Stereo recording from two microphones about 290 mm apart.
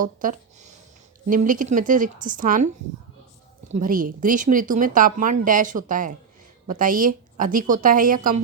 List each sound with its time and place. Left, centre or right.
0.0 s speech: right
3.7 s speech: right